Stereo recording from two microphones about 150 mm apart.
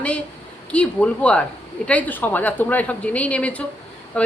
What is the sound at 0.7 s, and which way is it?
Speech, 10° left (ahead or behind).